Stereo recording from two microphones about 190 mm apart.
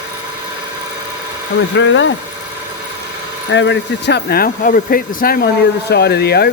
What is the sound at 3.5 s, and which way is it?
Speech, 70° left (ahead or behind).